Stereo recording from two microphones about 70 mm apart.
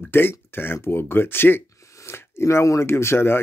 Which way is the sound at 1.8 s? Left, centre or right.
Left.